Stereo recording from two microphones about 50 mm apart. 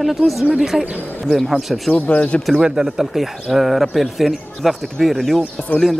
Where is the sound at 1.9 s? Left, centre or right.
Left.